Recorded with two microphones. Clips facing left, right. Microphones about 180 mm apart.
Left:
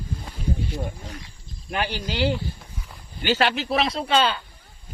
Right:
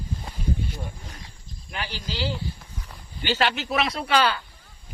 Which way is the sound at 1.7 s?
55° left (ahead or behind).